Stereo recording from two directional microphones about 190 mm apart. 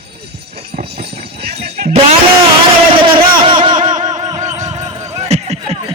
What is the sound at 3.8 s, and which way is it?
Music, 40° right (ahead or behind).